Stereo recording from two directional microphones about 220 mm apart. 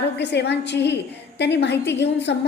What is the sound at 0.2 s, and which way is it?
A woman's voice, 50° left (ahead or behind).